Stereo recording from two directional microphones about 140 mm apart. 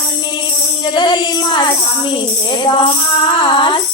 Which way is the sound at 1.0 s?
35° left (ahead or behind).